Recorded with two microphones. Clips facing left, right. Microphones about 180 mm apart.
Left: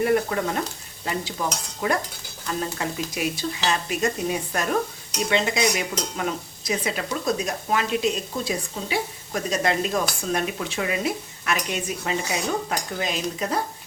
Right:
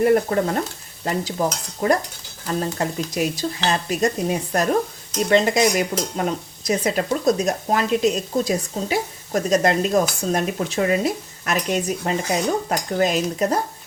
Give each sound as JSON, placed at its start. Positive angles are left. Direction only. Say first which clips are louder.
{"t": 0.0, "sound": "a sound", "louder": "right 4 dB", "side_deg": -40}
{"t": 1.0, "sound": "speech", "louder": "right 5 dB", "side_deg": -40}
{"t": 5.3, "sound": "dishes", "louder": "right 6 dB", "side_deg": -45}
{"t": 6.7, "sound": "speech", "louder": "right 6 dB", "side_deg": -40}